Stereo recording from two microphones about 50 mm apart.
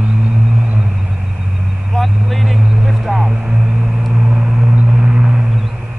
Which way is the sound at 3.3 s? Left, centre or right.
Right.